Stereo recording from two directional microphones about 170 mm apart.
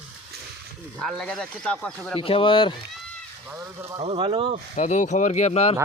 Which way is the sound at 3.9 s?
30° right (ahead or behind).